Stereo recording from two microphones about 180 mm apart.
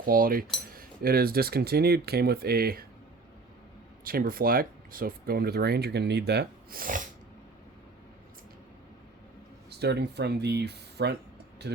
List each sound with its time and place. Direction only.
0.0 s cutlery: 50° right (ahead or behind)
0.8 s speech: 55° right (ahead or behind)
4.0 s speech: 55° right (ahead or behind)
9.6 s speech: 65° right (ahead or behind)